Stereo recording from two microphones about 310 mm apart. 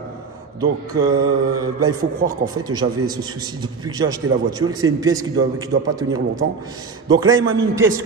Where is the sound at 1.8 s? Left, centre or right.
Right.